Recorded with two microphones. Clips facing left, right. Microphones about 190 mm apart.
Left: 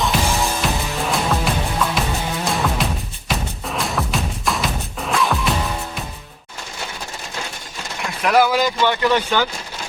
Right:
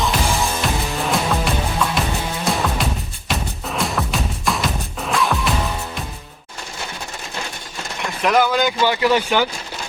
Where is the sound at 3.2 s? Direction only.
Centre (ahead or behind).